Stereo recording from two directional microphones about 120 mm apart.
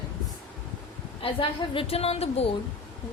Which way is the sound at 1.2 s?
50° left (ahead or behind).